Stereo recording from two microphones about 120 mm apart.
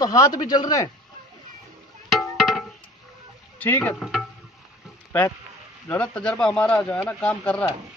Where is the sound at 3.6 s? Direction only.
15° left (ahead or behind).